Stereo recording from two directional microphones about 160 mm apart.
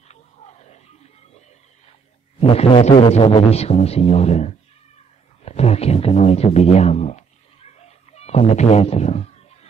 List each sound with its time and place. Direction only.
0.1 s wild animals: 45° left (ahead or behind)
2.4 s speech: 35° left (ahead or behind)
5.4 s a sound: 40° left (ahead or behind)